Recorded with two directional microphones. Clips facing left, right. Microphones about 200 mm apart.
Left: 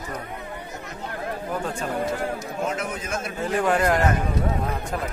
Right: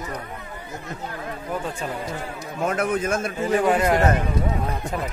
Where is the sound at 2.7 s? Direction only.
55° right (ahead or behind).